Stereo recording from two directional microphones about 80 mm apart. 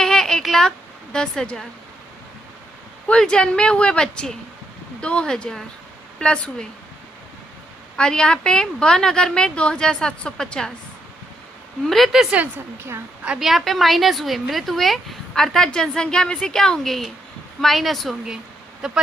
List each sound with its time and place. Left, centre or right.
0.0 s a sound: centre
1.1 s a woman's voice: centre
3.1 s a woman's voice: centre
7.9 s a woman's voice: centre
11.9 s speech: centre
12.5 s a woman's voice: right
13.4 s speech: centre